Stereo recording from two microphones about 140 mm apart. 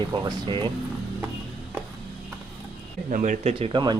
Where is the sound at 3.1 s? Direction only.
70° right (ahead or behind).